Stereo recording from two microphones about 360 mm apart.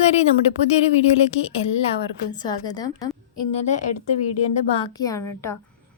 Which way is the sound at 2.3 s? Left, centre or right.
Centre.